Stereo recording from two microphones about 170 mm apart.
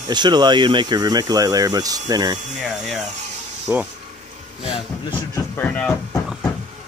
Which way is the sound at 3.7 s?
15° right (ahead or behind).